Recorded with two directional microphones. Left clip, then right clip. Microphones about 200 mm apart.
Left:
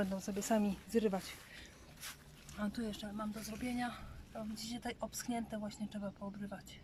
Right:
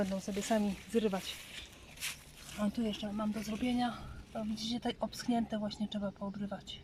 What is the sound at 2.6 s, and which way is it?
Speech, 10° right (ahead or behind).